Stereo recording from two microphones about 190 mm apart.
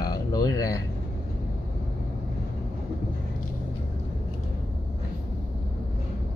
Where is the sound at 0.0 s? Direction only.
20° left (ahead or behind).